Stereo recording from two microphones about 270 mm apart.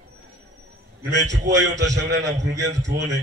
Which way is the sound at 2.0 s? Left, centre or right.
Right.